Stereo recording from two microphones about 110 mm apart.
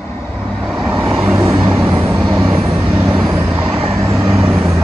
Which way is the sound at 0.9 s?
15° right (ahead or behind).